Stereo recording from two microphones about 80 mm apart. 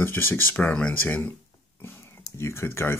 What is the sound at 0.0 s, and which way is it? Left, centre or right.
Speech, left.